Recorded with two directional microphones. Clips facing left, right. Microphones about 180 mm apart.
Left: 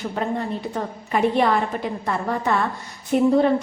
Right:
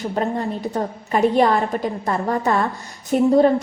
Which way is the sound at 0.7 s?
40° right (ahead or behind).